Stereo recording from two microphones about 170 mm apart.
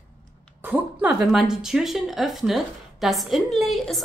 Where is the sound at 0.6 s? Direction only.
10° right (ahead or behind).